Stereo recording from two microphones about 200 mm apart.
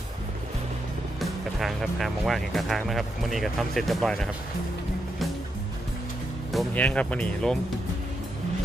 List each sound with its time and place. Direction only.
1.2 s speech: centre (ahead or behind)
6.5 s speech: 5° left (ahead or behind)